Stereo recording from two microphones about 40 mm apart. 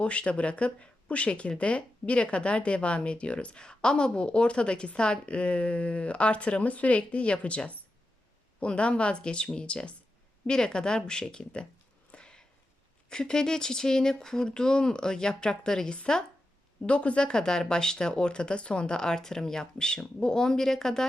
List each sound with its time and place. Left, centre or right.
0.0 s speech: left
12.1 s a sound: left
13.1 s speech: centre
16.8 s speech: left; by 21.1 s centre